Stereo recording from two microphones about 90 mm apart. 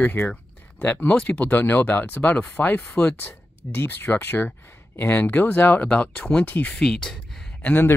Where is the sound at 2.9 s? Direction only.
10° left (ahead or behind).